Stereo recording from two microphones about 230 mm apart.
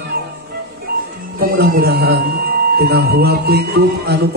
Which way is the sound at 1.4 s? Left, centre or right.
Right.